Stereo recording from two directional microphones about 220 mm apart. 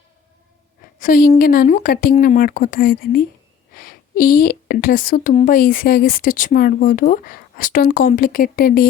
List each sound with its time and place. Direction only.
0.9 s speech: 35° left (ahead or behind)